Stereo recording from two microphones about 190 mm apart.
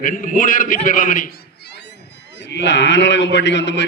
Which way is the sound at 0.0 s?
45° left (ahead or behind).